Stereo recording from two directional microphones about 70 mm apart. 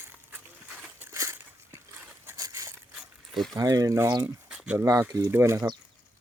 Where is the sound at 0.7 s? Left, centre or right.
Centre.